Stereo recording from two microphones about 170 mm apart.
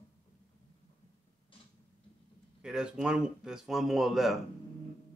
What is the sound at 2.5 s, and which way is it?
Speech, 5° right (ahead or behind).